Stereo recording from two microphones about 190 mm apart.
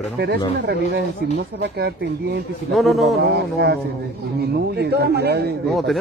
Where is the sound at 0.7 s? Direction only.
60° right (ahead or behind).